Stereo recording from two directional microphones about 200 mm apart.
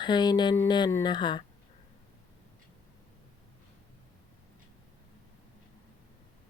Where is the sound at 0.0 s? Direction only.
20° left (ahead or behind).